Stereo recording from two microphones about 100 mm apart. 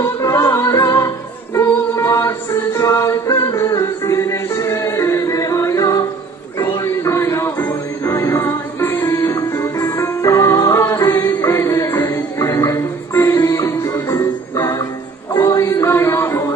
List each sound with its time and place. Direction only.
0.0 s music: 30° left (ahead or behind)